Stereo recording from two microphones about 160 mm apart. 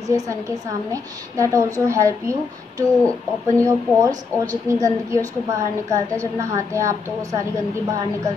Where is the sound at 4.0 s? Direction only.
20° right (ahead or behind).